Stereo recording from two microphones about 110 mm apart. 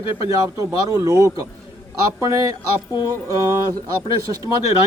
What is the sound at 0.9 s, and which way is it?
Speech, 30° right (ahead or behind).